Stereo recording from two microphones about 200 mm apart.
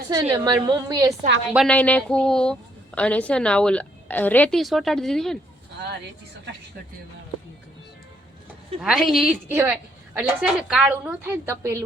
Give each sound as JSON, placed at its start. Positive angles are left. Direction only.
{"t": 0.1, "sound": "a woman's voice", "side_deg": -20}
{"t": 1.5, "sound": "a woman's voice", "side_deg": 5}
{"t": 8.8, "sound": "a woman's voice", "side_deg": 0}
{"t": 9.5, "sound": "a woman's voice", "side_deg": -10}